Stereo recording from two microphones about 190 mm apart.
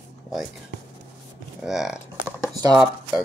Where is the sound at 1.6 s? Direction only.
Centre (ahead or behind).